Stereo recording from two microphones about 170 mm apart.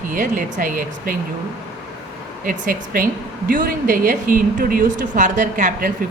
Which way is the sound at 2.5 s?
55° right (ahead or behind).